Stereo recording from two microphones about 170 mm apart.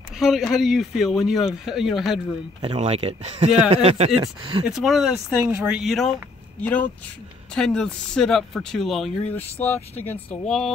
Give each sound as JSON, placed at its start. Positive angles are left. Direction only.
{"t": 0.2, "sound": "speech", "side_deg": 0}
{"t": 2.6, "sound": "speech", "side_deg": -35}
{"t": 4.6, "sound": "speech", "side_deg": 0}
{"t": 5.8, "sound": "speech", "side_deg": 0}
{"t": 9.3, "sound": "speech", "side_deg": 10}